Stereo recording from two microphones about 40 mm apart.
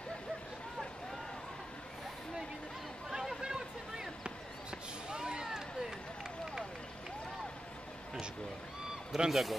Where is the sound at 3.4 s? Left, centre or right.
Centre.